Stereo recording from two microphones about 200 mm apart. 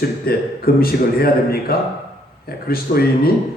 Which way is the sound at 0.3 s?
50° left (ahead or behind).